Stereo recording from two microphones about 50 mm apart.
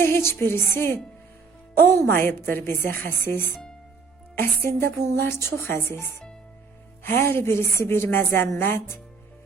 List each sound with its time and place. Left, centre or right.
0.0 s a woman's voice: left